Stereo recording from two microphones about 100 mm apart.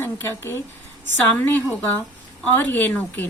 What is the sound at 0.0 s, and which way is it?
A woman's voice, 25° left (ahead or behind).